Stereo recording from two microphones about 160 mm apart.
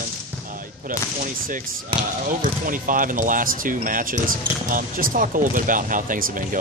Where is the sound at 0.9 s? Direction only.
55° right (ahead or behind).